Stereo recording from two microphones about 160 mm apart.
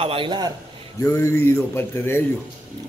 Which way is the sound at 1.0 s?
20° left (ahead or behind).